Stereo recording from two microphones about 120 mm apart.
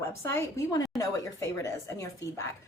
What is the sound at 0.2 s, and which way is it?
A woman's voice, 25° left (ahead or behind).